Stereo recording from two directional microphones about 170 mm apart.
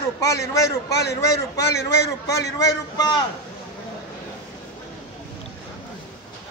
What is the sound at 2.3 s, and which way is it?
Speech, 20° left (ahead or behind).